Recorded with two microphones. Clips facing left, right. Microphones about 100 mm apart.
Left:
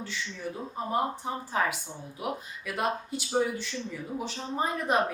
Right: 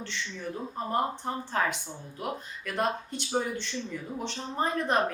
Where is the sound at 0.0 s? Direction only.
5° left (ahead or behind).